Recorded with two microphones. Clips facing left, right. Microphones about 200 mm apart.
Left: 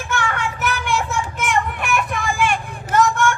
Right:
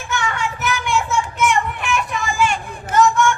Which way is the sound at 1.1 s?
55° left (ahead or behind).